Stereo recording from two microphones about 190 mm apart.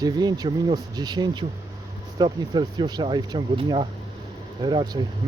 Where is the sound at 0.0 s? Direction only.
20° right (ahead or behind).